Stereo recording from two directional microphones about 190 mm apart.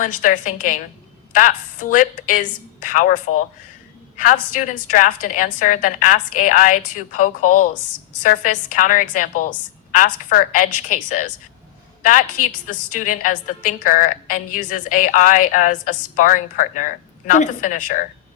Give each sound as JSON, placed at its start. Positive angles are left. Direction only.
{"t": 0.0, "sound": "a woman's voice", "side_deg": 45}